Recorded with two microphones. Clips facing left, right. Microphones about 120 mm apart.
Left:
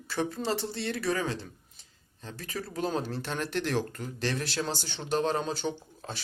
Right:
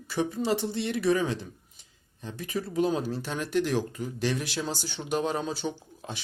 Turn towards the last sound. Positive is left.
turn(degrees=-10)  # may be behind; listen again after turning